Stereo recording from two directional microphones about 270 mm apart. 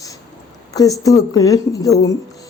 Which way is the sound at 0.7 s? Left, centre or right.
Centre.